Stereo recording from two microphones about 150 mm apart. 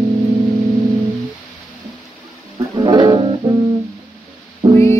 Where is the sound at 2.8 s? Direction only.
25° right (ahead or behind).